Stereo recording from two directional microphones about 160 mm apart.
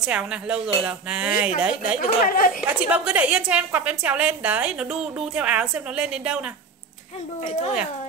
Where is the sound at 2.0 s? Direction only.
60° left (ahead or behind).